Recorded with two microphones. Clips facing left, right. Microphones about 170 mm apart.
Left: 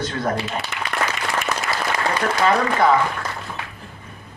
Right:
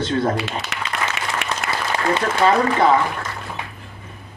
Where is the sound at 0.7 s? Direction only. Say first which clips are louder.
Even; 90° right.